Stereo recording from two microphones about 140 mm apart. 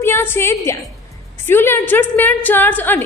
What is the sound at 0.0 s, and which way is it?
Speech, 15° left (ahead or behind).